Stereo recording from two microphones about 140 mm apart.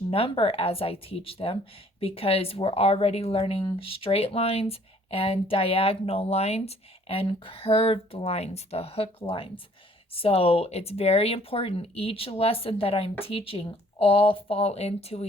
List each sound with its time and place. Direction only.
0.1 s speech: 40° left (ahead or behind)